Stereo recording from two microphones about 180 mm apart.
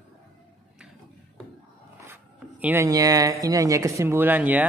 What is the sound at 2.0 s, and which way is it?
Speech, 10° right (ahead or behind).